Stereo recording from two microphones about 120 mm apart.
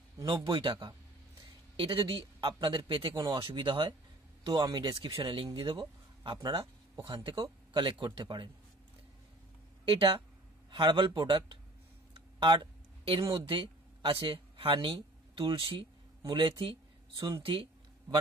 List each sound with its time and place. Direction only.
0.2 s a man's voice: 45° right (ahead or behind)
9.9 s a man's voice: 45° right (ahead or behind)
12.1 s a sound: 40° right (ahead or behind)
13.5 s a man's voice: 45° right (ahead or behind)